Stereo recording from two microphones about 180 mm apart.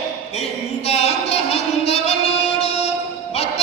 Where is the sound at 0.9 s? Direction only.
35° left (ahead or behind).